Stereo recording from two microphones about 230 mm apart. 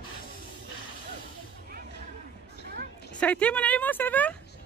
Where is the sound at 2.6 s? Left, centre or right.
Right.